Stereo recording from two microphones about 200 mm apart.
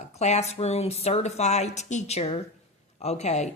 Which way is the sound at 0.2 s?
35° left (ahead or behind).